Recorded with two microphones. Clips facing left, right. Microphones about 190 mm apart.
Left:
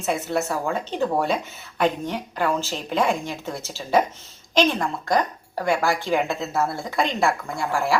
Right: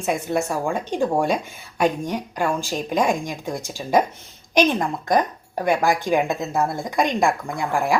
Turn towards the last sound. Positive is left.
turn(degrees=-15)  # may be behind; listen again after turning